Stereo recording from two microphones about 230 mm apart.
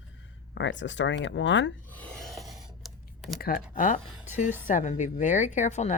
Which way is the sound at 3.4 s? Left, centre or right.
Left.